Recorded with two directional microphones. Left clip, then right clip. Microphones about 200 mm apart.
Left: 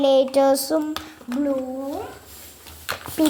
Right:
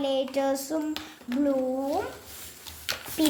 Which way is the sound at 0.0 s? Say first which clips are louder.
Left 10 dB; 35° left (ahead or behind).